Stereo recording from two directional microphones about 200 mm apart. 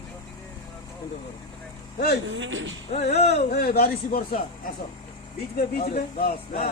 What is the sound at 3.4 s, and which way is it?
Speech, 50° left (ahead or behind).